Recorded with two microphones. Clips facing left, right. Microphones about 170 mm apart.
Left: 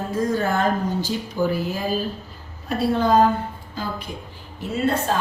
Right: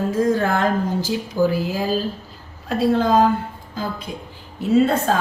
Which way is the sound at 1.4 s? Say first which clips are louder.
Right 4 dB; 40° right (ahead or behind).